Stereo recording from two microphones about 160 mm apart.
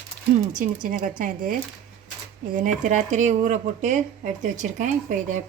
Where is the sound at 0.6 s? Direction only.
55° right (ahead or behind).